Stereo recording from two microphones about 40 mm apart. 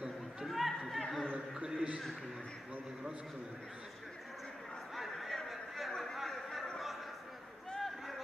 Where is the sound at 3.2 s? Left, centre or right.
Centre.